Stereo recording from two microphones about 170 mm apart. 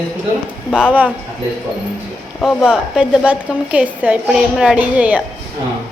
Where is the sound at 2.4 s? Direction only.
Centre (ahead or behind).